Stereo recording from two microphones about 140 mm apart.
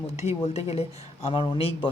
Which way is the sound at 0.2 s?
50° left (ahead or behind).